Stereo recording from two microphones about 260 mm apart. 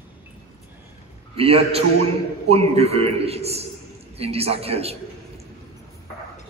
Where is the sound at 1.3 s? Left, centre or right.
Right.